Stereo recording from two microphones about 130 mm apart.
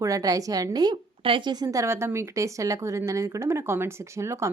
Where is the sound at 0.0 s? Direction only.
25° right (ahead or behind).